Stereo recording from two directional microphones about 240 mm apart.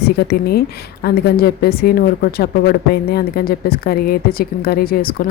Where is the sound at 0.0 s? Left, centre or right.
Left.